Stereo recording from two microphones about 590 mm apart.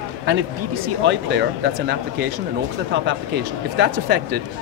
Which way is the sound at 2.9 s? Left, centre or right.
Centre.